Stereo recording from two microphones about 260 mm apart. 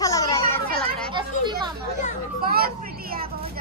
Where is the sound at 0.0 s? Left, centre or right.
Centre.